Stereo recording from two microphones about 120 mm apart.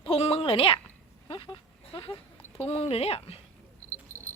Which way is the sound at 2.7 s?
60° left (ahead or behind).